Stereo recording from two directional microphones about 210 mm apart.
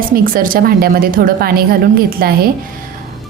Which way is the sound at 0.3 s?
40° right (ahead or behind).